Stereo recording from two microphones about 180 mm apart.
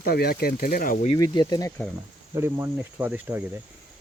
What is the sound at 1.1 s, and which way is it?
Speech, 20° left (ahead or behind).